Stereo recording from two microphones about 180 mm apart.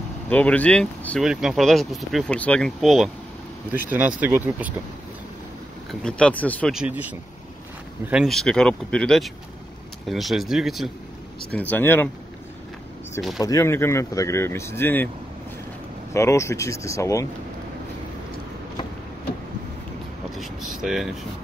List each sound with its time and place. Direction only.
0.3 s speech: 10° left (ahead or behind); by 4.7 s 10° right (ahead or behind)
5.9 s speech: 5° left (ahead or behind)
6.7 s speech: 5° right (ahead or behind)
11.5 s speech: 10° left (ahead or behind)
13.4 s speech: 20° left (ahead or behind)
16.1 s speech: 15° left (ahead or behind)
20.3 s vehicle: centre (ahead or behind)